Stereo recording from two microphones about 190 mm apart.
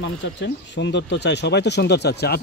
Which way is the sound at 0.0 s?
70° left (ahead or behind).